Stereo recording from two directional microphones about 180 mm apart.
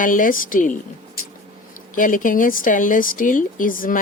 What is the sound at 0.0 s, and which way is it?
Speech, 50° left (ahead or behind).